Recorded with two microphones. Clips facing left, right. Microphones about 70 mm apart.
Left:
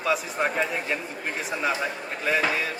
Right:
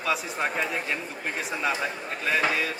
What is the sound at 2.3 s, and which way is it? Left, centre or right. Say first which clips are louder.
Speech: left 1 dB; centre.